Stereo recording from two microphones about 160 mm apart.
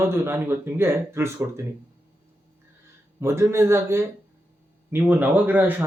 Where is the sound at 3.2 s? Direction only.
15° right (ahead or behind).